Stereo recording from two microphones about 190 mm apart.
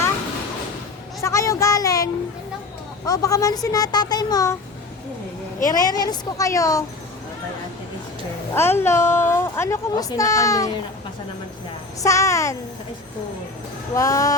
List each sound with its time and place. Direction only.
1.2 s a sound: 15° left (ahead or behind)
3.1 s a child's voice: 20° left (ahead or behind)
5.6 s a child's voice: 20° left (ahead or behind)
8.5 s a woman's voice: 10° left (ahead or behind)
12.0 s a woman's voice: 15° left (ahead or behind)
13.9 s a woman's voice: 15° left (ahead or behind)